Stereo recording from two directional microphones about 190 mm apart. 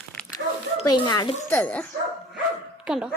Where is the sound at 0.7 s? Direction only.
25° left (ahead or behind).